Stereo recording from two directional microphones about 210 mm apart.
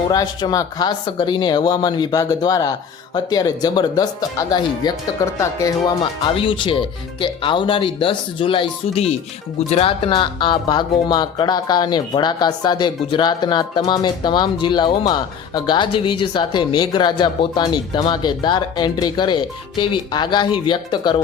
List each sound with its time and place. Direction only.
0.1 s speech: 15° left (ahead or behind)